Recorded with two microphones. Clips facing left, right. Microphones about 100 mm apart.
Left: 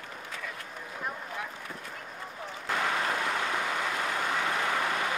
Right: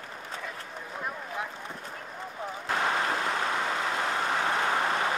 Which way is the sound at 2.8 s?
40° right (ahead or behind).